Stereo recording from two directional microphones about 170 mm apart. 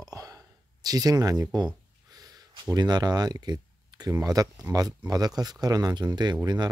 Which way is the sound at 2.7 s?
25° right (ahead or behind).